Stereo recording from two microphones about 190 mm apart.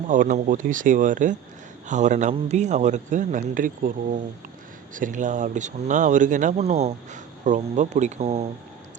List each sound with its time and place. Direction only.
0.1 s speech: 45° right (ahead or behind)